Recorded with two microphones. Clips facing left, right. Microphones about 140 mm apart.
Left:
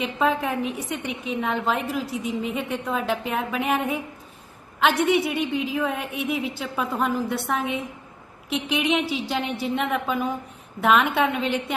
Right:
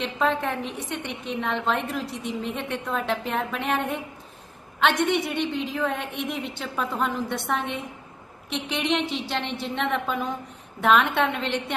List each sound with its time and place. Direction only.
0.0 s a woman's voice: 5° left (ahead or behind)